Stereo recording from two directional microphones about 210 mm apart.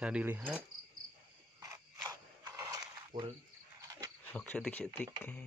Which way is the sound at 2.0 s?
15° right (ahead or behind).